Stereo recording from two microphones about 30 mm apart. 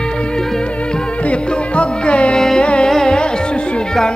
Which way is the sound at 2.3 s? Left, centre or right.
Centre.